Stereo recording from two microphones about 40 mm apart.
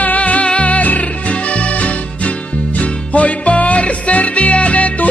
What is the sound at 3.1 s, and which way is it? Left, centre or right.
Music, left.